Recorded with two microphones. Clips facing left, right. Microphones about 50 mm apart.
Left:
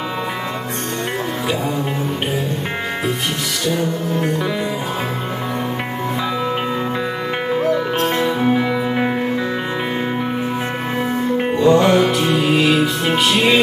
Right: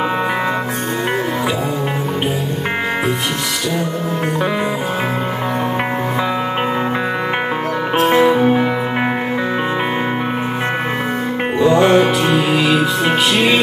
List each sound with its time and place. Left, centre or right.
8.0 s music: centre
11.6 s music: centre
13.0 s music: centre